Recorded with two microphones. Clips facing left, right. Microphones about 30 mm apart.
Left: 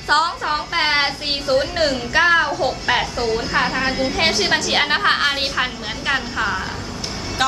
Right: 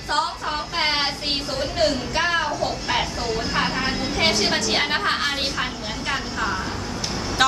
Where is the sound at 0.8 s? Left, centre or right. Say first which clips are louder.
Left 4 dB; left.